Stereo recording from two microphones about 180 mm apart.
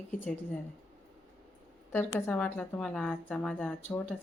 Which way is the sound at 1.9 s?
10° left (ahead or behind).